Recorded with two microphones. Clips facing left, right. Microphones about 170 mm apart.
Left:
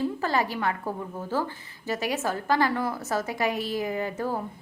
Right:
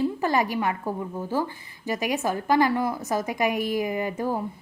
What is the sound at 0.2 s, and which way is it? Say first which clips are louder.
A woman's voice: right 3 dB; 15° right (ahead or behind).